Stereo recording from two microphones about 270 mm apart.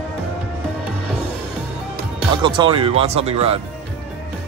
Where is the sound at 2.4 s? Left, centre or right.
Centre.